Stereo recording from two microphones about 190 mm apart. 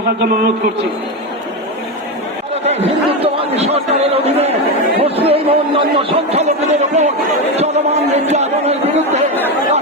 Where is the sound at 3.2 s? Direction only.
30° right (ahead or behind).